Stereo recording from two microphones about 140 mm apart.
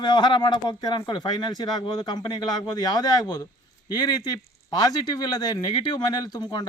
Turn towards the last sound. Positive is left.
turn(degrees=30)  # may be behind; listen again after turning